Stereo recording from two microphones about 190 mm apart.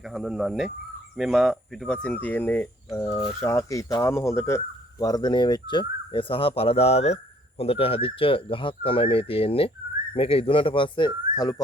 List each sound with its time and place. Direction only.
0.0 s speech: centre (ahead or behind); by 11.6 s 20° left (ahead or behind)